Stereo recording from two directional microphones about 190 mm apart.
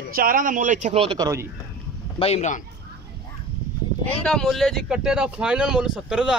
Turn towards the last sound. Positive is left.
turn(degrees=-5)  # may be behind; listen again after turning